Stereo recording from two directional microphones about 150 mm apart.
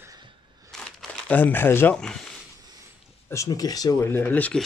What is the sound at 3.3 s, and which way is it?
Speech, 20° left (ahead or behind).